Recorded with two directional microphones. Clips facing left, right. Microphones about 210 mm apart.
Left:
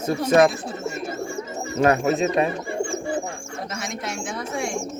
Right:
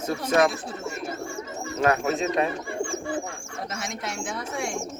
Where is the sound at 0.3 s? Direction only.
30° left (ahead or behind).